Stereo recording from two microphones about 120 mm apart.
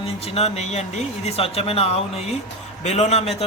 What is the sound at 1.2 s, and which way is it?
Speech, 55° left (ahead or behind).